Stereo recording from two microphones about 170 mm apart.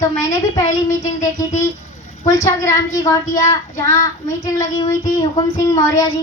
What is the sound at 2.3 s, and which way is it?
A woman's voice, 20° left (ahead or behind).